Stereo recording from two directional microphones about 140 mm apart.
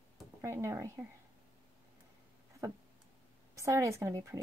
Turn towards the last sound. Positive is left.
turn(degrees=-20)  # may be behind; listen again after turning